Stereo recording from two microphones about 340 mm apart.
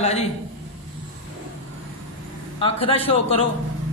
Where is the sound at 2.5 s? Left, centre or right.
Centre.